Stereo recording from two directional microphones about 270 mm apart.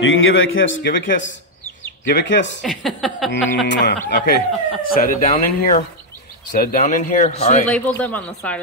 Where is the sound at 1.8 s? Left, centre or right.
Left.